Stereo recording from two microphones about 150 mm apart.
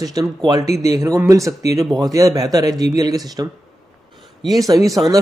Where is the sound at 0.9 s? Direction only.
20° right (ahead or behind).